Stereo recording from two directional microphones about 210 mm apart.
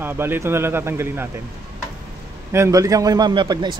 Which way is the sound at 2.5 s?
15° right (ahead or behind).